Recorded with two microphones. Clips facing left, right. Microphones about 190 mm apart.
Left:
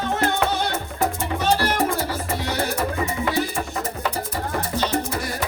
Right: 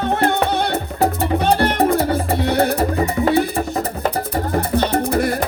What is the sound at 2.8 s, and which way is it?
Music, 35° right (ahead or behind).